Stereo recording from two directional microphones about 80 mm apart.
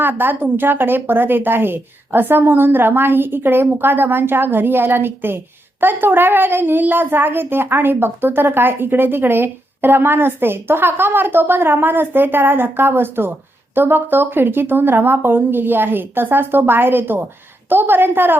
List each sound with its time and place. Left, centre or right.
0.0 s a child's voice: right